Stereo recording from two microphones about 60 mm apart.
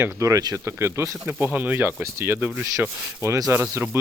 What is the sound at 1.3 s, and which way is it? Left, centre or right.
Speech, right.